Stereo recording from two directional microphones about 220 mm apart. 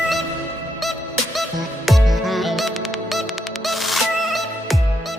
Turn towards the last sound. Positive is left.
turn(degrees=0)  # may be behind; listen again after turning